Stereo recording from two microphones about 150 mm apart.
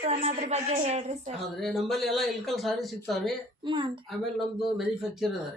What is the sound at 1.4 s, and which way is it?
Speech, centre (ahead or behind).